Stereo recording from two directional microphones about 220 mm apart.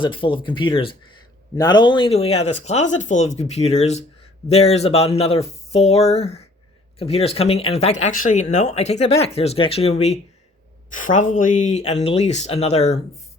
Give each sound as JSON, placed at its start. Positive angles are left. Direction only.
{"t": 0.0, "sound": "speech", "side_deg": 20}